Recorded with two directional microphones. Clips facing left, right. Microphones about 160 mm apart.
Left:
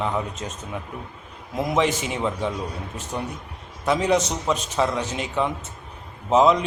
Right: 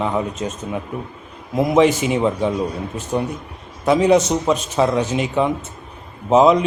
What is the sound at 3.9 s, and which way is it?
Speech, 10° right (ahead or behind).